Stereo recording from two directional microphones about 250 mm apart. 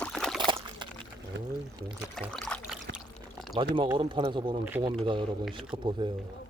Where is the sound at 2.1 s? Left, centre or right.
Centre.